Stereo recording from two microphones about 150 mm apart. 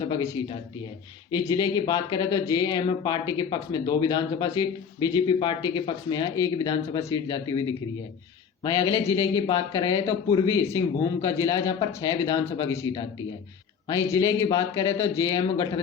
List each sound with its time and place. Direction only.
0.1 s speech: 30° left (ahead or behind)
8.6 s speech: 20° left (ahead or behind)